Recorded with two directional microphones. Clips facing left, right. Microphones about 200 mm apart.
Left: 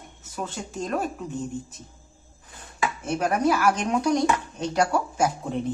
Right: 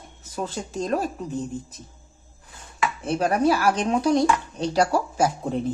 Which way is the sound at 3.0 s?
30° right (ahead or behind).